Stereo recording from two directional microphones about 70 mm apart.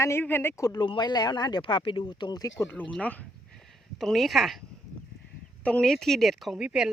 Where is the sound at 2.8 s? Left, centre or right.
Left.